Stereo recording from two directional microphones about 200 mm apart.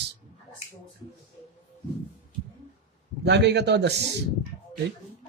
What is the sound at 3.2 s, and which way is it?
Speech, 55° right (ahead or behind).